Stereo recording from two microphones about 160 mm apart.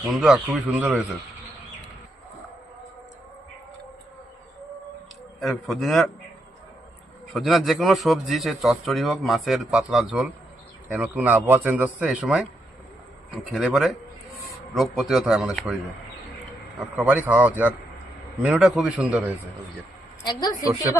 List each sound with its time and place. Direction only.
0.1 s a man's voice: 5° right (ahead or behind)
5.4 s a man's voice: centre (ahead or behind)
7.3 s a man's voice: centre (ahead or behind)
17.0 s a man's voice: 10° right (ahead or behind)
20.2 s a woman's voice: 25° left (ahead or behind)